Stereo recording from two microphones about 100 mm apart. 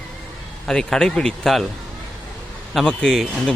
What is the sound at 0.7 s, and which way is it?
Speech, 5° left (ahead or behind).